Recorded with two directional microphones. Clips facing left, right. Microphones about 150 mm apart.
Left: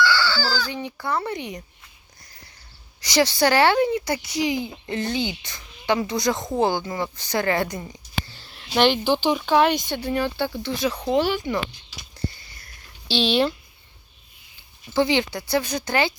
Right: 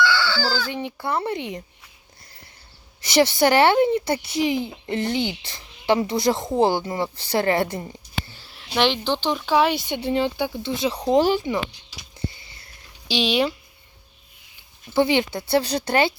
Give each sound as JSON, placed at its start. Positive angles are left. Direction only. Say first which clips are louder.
{"t": 0.3, "sound": "speech", "louder": "right 1 dB", "side_deg": -25}
{"t": 3.0, "sound": "speech", "louder": "right 2 dB", "side_deg": -25}
{"t": 8.3, "sound": "a sound", "louder": "even", "side_deg": -10}
{"t": 8.7, "sound": "speech", "louder": "left 2 dB", "side_deg": 5}
{"t": 10.0, "sound": "speech", "louder": "right 2 dB", "side_deg": -25}
{"t": 10.9, "sound": "speech", "louder": "right 5 dB", "side_deg": -35}
{"t": 12.3, "sound": "a sound", "louder": "right 1 dB", "side_deg": -25}
{"t": 13.1, "sound": "speech", "louder": "left 1 dB", "side_deg": -10}
{"t": 14.9, "sound": "speech", "louder": "right 1 dB", "side_deg": -25}